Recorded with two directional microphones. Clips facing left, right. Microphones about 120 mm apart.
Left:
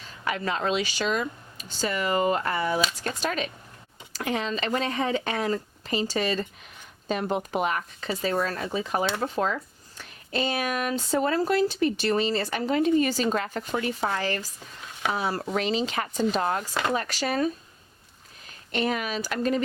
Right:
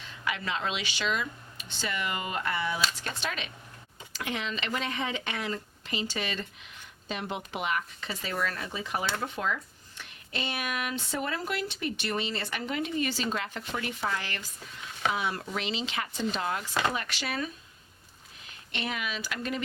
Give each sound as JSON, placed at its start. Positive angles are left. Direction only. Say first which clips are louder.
{"t": 0.3, "sound": "speech", "louder": "left 5 dB", "side_deg": 40}